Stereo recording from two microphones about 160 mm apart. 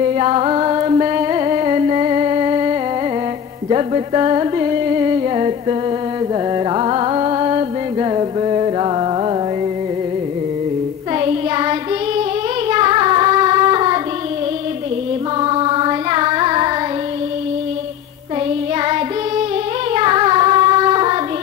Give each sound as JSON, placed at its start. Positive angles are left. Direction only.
{"t": 0.0, "sound": "music", "side_deg": -35}
{"t": 11.1, "sound": "child singing", "side_deg": -30}
{"t": 12.2, "sound": "a sound", "side_deg": -30}
{"t": 15.4, "sound": "carnatic music", "side_deg": -35}
{"t": 19.9, "sound": "child singing", "side_deg": -30}